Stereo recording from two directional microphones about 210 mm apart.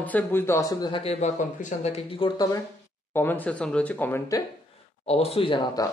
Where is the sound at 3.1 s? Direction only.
10° left (ahead or behind).